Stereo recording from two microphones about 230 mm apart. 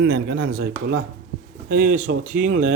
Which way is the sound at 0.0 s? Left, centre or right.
Right.